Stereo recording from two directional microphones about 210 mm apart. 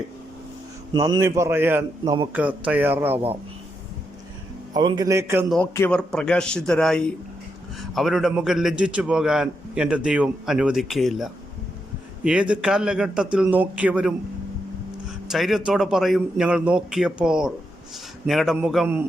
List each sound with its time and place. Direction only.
0.9 s a man's voice: 15° right (ahead or behind)
4.7 s a man's voice: 20° right (ahead or behind)
5.7 s a man's voice: 10° left (ahead or behind)
15.3 s a man's voice: centre (ahead or behind)